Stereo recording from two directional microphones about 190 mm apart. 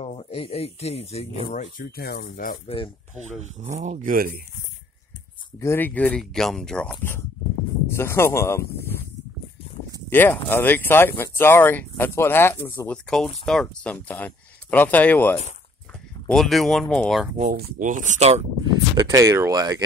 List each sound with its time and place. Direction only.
0.0 s speech: 30° left (ahead or behind); by 2.6 s 50° left (ahead or behind)
3.3 s speech: 40° right (ahead or behind)
5.6 s speech: 10° left (ahead or behind)
10.0 s speech: 10° left (ahead or behind)
17.4 s speech: 45° right (ahead or behind)
18.9 s speech: 15° right (ahead or behind)